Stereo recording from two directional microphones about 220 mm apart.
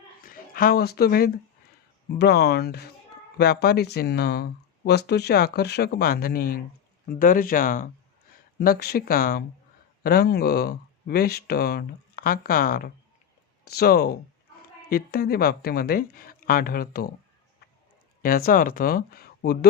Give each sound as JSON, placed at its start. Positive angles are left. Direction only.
{"t": 0.2, "sound": "speech", "side_deg": 40}
{"t": 18.2, "sound": "speech", "side_deg": 40}